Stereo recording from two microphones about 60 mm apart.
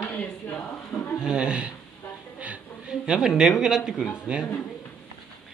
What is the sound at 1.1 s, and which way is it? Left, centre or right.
Speech, centre.